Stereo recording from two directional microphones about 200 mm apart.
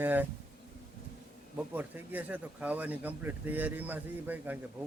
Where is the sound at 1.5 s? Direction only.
10° right (ahead or behind).